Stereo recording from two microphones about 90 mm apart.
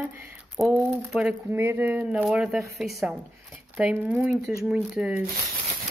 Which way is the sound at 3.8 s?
20° right (ahead or behind).